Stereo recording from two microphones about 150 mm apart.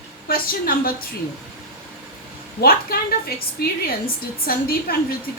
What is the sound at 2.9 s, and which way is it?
A woman's voice, 90° left.